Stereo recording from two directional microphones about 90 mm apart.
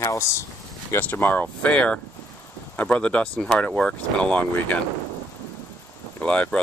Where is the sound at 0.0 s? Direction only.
35° left (ahead or behind).